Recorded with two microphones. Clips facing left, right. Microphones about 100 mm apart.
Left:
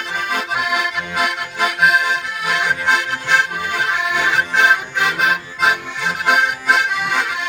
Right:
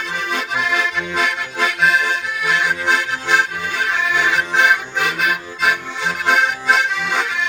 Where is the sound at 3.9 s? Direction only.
20° left (ahead or behind).